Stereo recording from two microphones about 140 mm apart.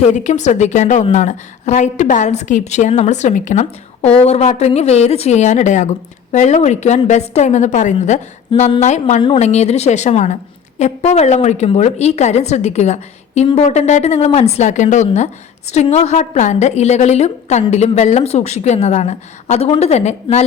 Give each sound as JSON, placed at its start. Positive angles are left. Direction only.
{"t": 0.0, "sound": "a woman's voice", "side_deg": 55}